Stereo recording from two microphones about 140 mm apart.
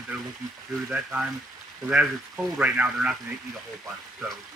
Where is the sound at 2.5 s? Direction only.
10° right (ahead or behind).